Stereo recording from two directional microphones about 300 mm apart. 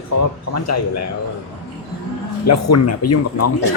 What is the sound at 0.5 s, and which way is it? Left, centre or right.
Speech, left.